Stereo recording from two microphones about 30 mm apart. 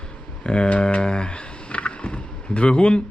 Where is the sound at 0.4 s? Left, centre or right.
Left.